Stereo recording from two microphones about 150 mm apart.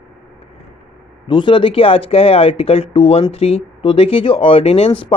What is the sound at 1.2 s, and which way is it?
Speech, 35° left (ahead or behind).